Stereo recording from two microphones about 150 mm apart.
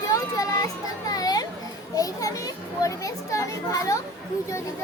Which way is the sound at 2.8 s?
20° left (ahead or behind).